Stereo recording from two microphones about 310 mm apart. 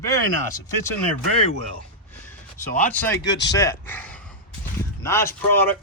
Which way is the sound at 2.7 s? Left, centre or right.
Centre.